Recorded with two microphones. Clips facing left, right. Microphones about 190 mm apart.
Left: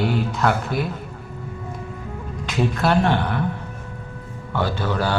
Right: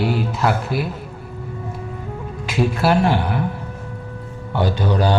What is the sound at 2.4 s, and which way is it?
Speech, 10° right (ahead or behind).